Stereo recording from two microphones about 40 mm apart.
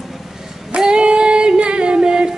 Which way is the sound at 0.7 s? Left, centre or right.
Right.